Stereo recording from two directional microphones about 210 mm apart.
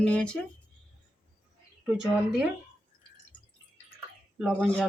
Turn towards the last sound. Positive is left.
turn(degrees=5)  # may be behind; listen again after turning